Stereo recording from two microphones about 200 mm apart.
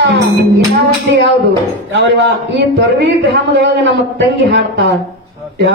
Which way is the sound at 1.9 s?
60° right (ahead or behind).